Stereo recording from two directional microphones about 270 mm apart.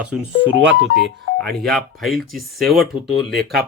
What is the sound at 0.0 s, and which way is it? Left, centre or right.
Speech, centre.